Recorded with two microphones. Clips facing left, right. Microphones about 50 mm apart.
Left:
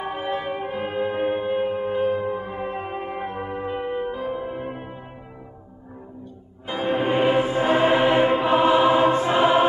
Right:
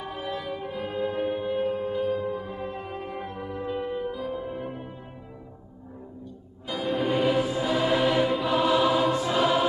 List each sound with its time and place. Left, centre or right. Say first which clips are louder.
0.0 s music: left 6 dB; left
6.7 s music: left 4 dB; left